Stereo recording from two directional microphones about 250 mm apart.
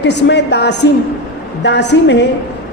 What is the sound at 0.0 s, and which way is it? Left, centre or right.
A man's voice, left.